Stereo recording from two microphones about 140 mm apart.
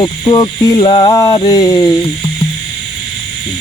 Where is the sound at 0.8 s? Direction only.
40° left (ahead or behind).